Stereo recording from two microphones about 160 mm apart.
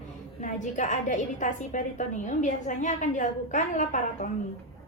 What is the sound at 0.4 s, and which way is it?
A woman's voice, 50° left (ahead or behind).